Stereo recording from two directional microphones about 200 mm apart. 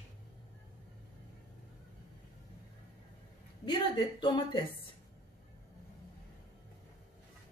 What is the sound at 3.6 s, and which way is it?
A woman's voice, 25° left (ahead or behind).